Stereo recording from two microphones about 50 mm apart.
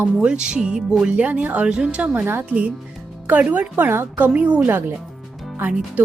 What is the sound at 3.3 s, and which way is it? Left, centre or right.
Speech, right.